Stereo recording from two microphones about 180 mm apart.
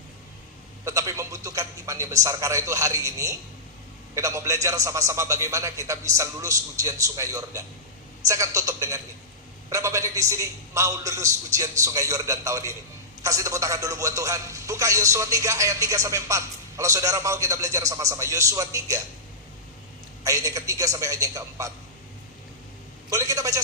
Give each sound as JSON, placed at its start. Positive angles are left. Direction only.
{"t": 0.9, "sound": "a man's voice", "side_deg": -15}
{"t": 20.2, "sound": "a man's voice", "side_deg": -20}
{"t": 23.0, "sound": "a man's voice", "side_deg": -20}